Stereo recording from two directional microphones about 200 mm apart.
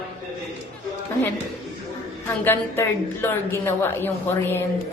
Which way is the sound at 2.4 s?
10° left (ahead or behind).